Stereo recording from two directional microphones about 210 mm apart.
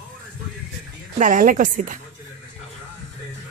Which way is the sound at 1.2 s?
40° right (ahead or behind).